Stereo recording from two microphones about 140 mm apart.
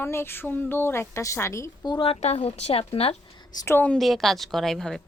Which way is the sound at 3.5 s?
20° left (ahead or behind).